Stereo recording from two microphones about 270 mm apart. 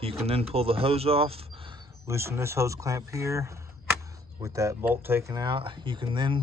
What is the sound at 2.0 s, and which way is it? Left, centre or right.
Speech, centre.